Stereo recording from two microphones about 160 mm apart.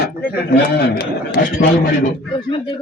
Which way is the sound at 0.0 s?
75° left (ahead or behind).